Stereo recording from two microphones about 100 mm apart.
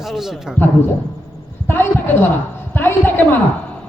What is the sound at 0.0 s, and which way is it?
Speech, 5° right (ahead or behind).